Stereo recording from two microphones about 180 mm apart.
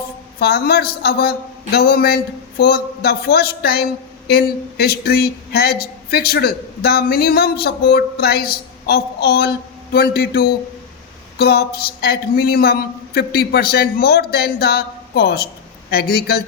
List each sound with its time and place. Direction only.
0.3 s speech: 60° left (ahead or behind)